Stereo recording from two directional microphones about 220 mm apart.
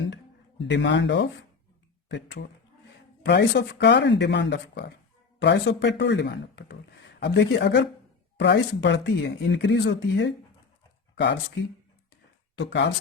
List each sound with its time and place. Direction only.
0.6 s speech: 55° left (ahead or behind)
11.1 s a sound: 55° left (ahead or behind)
12.5 s speech: 50° left (ahead or behind)